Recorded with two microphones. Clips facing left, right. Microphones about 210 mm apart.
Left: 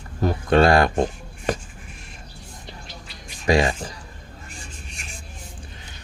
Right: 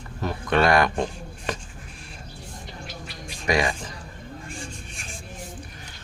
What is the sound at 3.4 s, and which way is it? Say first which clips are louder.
Music: left 4 dB; 30° left (ahead or behind).